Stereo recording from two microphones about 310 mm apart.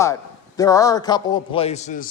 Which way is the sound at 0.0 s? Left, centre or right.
Centre.